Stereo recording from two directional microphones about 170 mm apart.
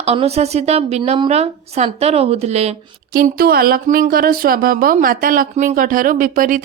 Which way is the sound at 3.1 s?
60° right (ahead or behind).